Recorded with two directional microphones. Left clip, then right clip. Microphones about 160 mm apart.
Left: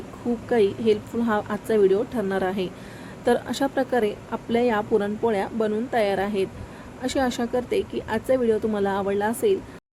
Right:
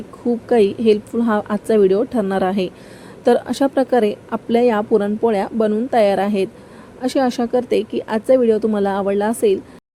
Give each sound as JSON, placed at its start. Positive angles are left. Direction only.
{"t": 0.4, "sound": "a woman's voice", "side_deg": -30}